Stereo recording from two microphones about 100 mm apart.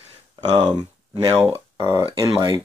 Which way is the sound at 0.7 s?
45° right (ahead or behind).